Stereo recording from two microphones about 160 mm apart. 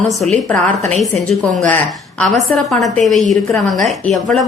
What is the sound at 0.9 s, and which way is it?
A woman's voice, centre (ahead or behind).